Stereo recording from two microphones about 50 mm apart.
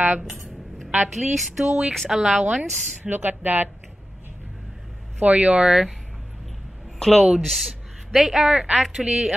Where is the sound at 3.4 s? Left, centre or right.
Right.